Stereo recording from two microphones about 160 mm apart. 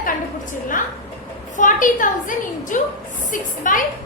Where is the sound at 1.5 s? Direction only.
55° left (ahead or behind).